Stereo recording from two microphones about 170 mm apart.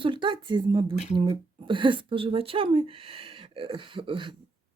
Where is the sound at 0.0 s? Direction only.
30° right (ahead or behind).